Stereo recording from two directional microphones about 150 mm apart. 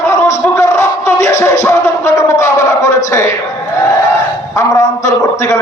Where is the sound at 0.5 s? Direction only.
20° left (ahead or behind).